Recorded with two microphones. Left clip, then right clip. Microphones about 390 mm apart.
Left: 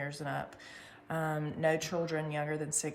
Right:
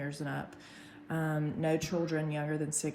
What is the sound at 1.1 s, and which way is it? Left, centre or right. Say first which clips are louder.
Speech: left 1 dB; left.